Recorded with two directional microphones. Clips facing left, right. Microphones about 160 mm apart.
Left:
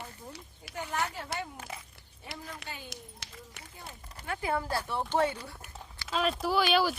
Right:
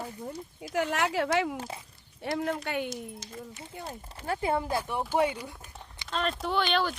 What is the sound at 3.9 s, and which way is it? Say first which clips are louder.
Speech: right 5 dB; 35° right (ahead or behind).